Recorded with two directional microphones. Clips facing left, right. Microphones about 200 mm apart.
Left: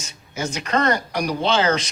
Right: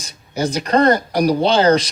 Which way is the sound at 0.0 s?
35° right (ahead or behind).